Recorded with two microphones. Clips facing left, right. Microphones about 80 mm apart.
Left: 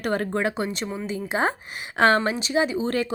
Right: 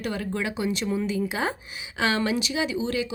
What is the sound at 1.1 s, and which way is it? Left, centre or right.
A woman's voice, left.